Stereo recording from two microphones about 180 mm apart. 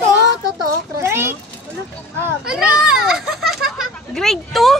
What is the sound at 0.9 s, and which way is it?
A child's voice, 15° right (ahead or behind).